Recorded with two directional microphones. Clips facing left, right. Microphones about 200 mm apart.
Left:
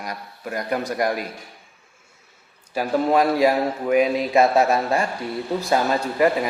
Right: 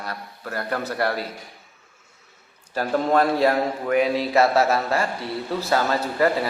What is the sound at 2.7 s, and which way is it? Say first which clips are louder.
A man's voice: left 1 dB; 10° left (ahead or behind).